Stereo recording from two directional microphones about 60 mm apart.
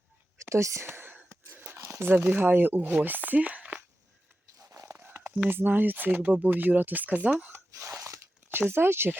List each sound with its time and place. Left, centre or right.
0.5 s speech: right
0.9 s whispering: right
1.5 s speech: right
4.5 s a sound: right
4.9 s a sound: right
5.5 s speech: right
7.9 s crunch: right
8.5 s speech: right